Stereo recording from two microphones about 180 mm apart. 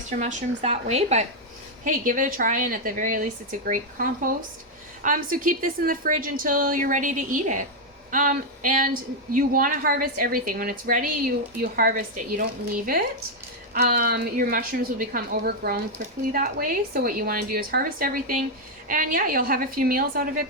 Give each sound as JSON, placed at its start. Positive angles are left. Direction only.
{"t": 0.2, "sound": "a woman's voice", "side_deg": -40}